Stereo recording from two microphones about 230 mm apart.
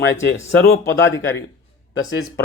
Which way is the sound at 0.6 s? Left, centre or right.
Left.